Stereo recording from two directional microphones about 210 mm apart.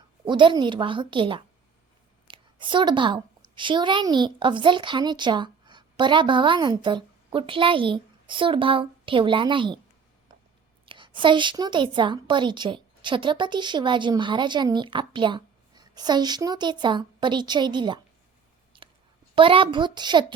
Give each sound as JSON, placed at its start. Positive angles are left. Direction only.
{"t": 0.3, "sound": "a woman's voice", "side_deg": -20}
{"t": 10.8, "sound": "a woman's voice", "side_deg": -25}
{"t": 18.7, "sound": "a sound", "side_deg": -25}
{"t": 19.4, "sound": "a woman's voice", "side_deg": -25}